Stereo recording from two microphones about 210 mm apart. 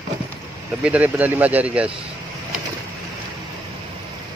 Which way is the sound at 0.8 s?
5° right (ahead or behind).